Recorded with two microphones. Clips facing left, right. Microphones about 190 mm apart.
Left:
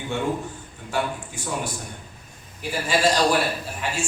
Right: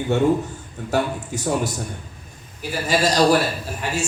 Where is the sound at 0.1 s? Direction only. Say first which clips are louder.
Right 7 dB; 40° right (ahead or behind).